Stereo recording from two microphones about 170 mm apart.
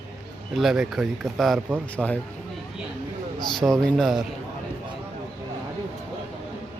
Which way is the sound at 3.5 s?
5° left (ahead or behind).